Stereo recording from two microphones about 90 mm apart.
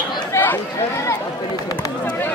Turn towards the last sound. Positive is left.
turn(degrees=25)  # may be behind; listen again after turning